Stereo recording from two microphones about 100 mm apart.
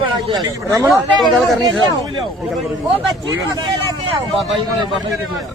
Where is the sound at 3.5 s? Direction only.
50° right (ahead or behind).